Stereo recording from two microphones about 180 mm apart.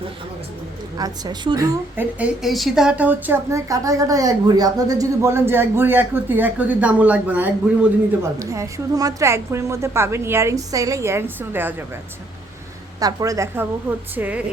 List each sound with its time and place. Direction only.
0.9 s a woman's voice: 20° right (ahead or behind)
2.1 s a woman's voice: 5° right (ahead or behind)
13.0 s a woman's voice: 20° right (ahead or behind)